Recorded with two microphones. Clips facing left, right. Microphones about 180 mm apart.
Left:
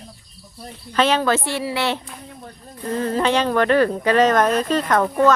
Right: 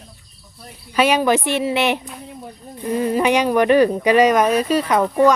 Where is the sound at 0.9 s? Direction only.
10° right (ahead or behind).